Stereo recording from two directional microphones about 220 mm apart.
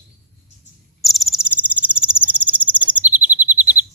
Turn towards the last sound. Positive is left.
turn(degrees=-10)  # may be behind; listen again after turning